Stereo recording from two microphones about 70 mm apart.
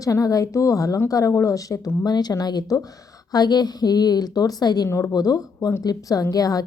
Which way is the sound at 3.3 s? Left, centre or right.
Left.